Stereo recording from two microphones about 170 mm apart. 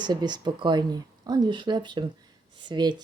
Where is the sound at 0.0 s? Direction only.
25° right (ahead or behind).